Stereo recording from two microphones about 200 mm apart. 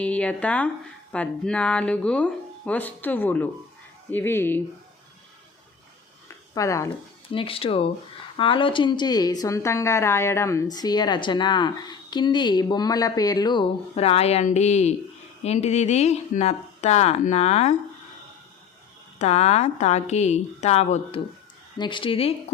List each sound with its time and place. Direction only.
0.0 s speech: 5° left (ahead or behind)
6.2 s a sound: 15° left (ahead or behind)
7.3 s a woman's voice: 30° left (ahead or behind)
19.2 s a woman's voice: 35° left (ahead or behind)